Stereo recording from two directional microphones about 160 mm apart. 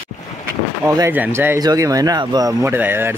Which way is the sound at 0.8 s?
15° right (ahead or behind).